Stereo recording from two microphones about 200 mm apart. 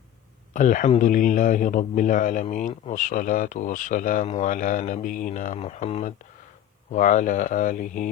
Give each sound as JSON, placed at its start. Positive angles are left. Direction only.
{"t": 0.5, "sound": "a man's voice", "side_deg": 40}